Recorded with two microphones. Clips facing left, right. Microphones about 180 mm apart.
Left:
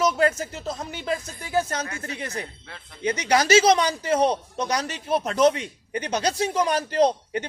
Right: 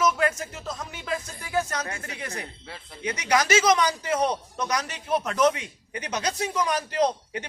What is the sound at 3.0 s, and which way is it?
Speech, 30° left (ahead or behind).